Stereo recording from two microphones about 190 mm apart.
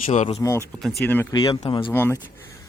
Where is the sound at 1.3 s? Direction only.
20° left (ahead or behind).